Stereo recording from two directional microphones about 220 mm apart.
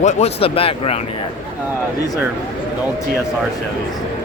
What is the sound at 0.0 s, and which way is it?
A man's voice, 30° left (ahead or behind).